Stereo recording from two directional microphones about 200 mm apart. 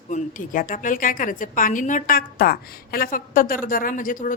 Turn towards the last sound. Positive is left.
turn(degrees=40)  # may be behind; listen again after turning